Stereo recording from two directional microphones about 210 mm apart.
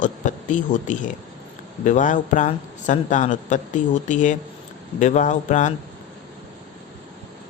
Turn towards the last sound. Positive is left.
turn(degrees=35)  # may be behind; listen again after turning